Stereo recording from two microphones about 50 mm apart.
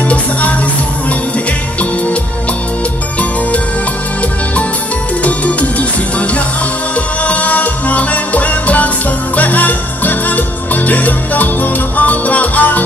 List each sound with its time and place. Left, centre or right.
0.1 s music: left
5.2 s music: left